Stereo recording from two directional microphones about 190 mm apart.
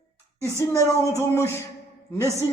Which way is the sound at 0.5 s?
15° left (ahead or behind).